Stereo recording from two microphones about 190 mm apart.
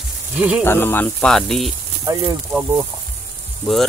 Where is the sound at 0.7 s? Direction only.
10° left (ahead or behind).